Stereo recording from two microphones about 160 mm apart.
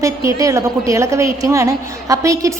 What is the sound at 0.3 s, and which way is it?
A woman's voice, 20° right (ahead or behind).